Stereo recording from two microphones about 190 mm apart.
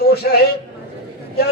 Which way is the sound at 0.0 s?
55° left (ahead or behind).